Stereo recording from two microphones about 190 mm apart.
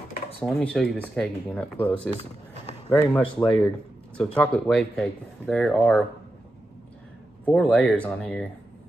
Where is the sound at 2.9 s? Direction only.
15° left (ahead or behind).